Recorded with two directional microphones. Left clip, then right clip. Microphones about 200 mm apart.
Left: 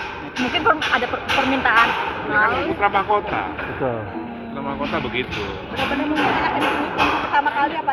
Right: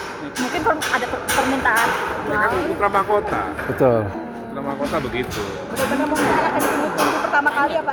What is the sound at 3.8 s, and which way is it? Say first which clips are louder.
Speech: right 8 dB; 90° right.